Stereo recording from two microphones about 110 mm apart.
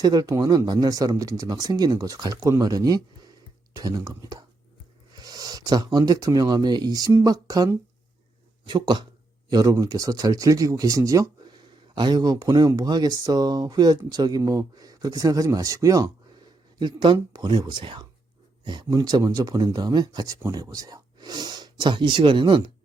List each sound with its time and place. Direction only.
0.0 s speech: 35° right (ahead or behind)